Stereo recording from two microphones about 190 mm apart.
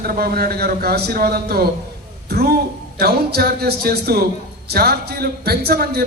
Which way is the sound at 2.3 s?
55° right (ahead or behind).